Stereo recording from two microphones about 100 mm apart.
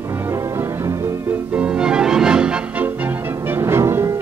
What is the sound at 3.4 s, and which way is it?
Music, 25° right (ahead or behind).